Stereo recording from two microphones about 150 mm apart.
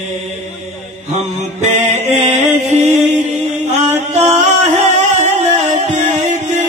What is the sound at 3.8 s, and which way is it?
Music, 50° right (ahead or behind).